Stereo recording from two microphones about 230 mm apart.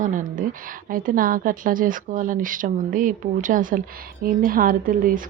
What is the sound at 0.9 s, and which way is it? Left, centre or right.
A woman's voice, right.